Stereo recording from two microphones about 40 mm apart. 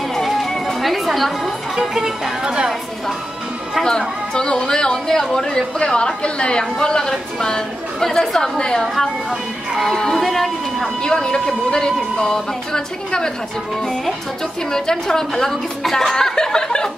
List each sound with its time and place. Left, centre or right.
0.1 s speech: centre
4.3 s a woman's voice: centre
8.5 s a sound: left
8.8 s speech: centre
11.0 s a woman's voice: centre
14.7 s a woman's voice: centre
16.1 s chuckle: centre
16.3 s a sound: centre